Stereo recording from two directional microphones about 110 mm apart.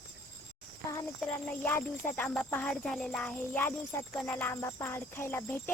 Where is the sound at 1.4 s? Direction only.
15° left (ahead or behind).